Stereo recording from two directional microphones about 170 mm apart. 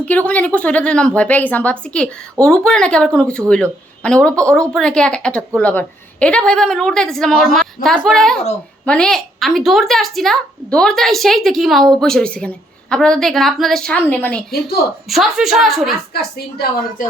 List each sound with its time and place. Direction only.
0.0 s a woman's voice: 10° left (ahead or behind)
16.1 s a woman's voice: 65° left (ahead or behind)